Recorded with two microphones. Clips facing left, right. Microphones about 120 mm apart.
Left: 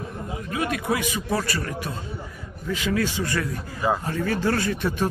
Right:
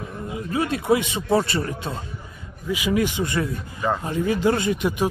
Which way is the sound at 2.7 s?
15° right (ahead or behind).